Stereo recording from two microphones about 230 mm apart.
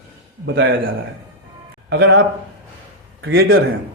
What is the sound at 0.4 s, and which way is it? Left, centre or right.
Speech, right.